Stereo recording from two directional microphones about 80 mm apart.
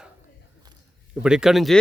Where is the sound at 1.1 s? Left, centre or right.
Centre.